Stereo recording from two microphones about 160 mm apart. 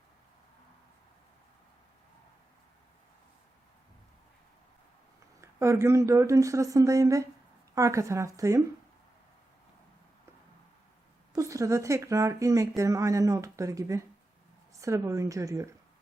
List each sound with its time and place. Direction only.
5.4 s speech: 15° right (ahead or behind)
11.3 s speech: 20° right (ahead or behind)